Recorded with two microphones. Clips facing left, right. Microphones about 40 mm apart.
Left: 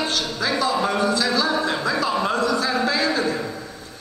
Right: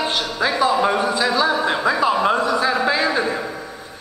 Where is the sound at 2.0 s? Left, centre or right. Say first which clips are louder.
Right 4 dB; right.